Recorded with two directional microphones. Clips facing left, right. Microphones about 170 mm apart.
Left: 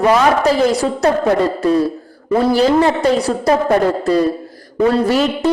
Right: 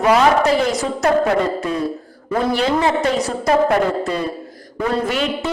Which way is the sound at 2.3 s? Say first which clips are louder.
Left 5 dB; 35° left (ahead or behind).